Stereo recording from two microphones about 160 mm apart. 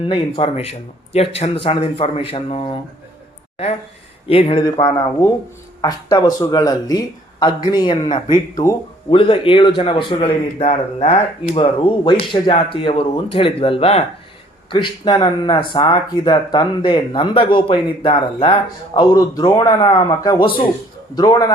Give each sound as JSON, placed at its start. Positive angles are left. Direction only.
{"t": 0.0, "sound": "a man's voice", "side_deg": 30}
{"t": 4.3, "sound": "a man's voice", "side_deg": 40}
{"t": 4.8, "sound": "a man's voice", "side_deg": 20}